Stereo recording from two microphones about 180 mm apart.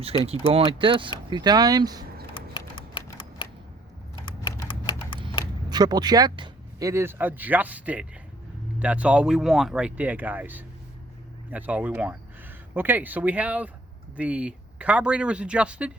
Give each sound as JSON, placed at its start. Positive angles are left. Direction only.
{"t": 0.3, "sound": "speech", "side_deg": -30}
{"t": 2.3, "sound": "typing", "side_deg": 25}
{"t": 4.7, "sound": "typing", "side_deg": 30}
{"t": 5.6, "sound": "speech", "side_deg": -20}